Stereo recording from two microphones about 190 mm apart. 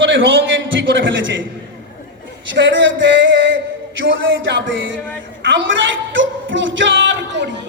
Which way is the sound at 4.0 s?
85° right.